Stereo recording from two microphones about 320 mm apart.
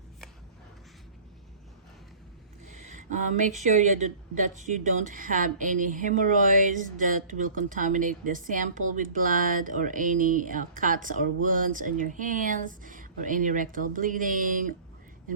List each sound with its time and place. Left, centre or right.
2.6 s speech: right